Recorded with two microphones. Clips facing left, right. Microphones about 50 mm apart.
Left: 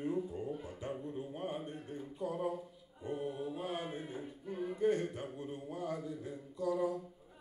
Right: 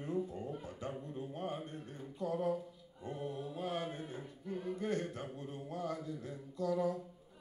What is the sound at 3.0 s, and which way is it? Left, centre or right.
Mantra, centre.